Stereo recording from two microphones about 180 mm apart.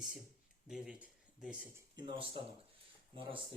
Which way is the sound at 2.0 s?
25° right (ahead or behind).